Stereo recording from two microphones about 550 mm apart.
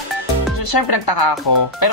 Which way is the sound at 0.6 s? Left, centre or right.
Left.